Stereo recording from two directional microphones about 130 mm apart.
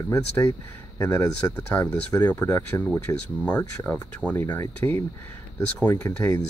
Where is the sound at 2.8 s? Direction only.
10° left (ahead or behind).